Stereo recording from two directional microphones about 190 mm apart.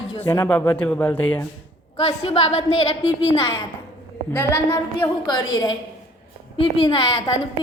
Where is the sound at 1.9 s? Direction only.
30° left (ahead or behind).